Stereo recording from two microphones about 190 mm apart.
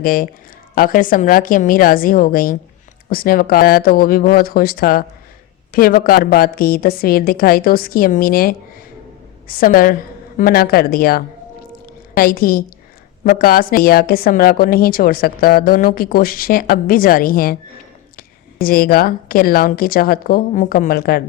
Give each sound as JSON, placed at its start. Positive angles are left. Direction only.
{"t": 0.0, "sound": "a woman's voice", "side_deg": 50}